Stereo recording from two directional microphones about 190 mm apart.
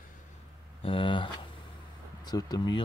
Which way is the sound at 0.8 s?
30° left (ahead or behind).